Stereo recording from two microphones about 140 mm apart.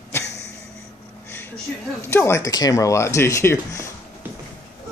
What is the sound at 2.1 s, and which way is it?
Speech, 20° left (ahead or behind).